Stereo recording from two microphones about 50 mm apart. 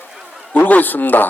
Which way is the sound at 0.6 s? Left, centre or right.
Left.